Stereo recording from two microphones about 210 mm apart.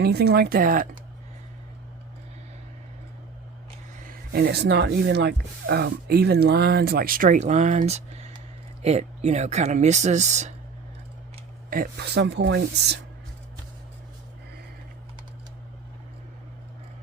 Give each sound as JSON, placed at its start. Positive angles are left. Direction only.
{"t": 0.0, "sound": "speech", "side_deg": -50}
{"t": 4.0, "sound": "speech", "side_deg": -50}
{"t": 11.7, "sound": "speech", "side_deg": -45}